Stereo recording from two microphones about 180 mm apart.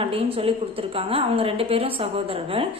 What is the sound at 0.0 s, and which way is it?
A woman's voice, 30° right (ahead or behind).